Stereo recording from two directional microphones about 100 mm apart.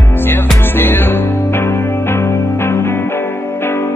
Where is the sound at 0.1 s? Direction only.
20° left (ahead or behind).